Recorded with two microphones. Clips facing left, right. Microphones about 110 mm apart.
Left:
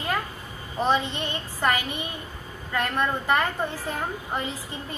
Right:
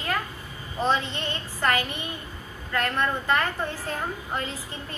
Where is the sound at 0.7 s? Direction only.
15° left (ahead or behind).